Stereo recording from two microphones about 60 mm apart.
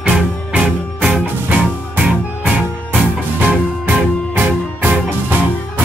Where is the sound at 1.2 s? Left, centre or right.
Right.